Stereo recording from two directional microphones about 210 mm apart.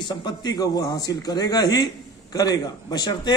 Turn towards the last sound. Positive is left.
turn(degrees=20)  # may be behind; listen again after turning